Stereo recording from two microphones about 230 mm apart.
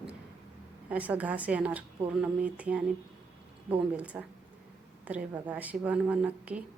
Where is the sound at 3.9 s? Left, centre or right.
Centre.